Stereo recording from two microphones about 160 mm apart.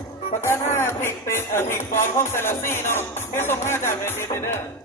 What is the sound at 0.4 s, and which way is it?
Music, 15° left (ahead or behind).